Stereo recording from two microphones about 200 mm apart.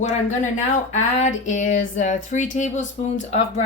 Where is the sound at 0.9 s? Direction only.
35° left (ahead or behind).